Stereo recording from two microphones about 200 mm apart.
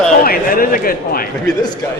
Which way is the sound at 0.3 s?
45° left (ahead or behind).